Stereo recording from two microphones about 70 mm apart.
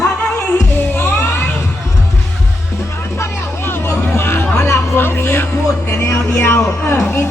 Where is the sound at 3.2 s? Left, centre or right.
Left.